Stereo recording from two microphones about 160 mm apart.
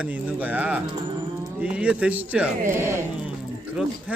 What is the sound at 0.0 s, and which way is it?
Speech, 10° right (ahead or behind).